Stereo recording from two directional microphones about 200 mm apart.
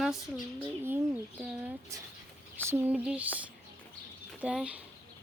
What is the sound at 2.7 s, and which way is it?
Speech, 10° right (ahead or behind).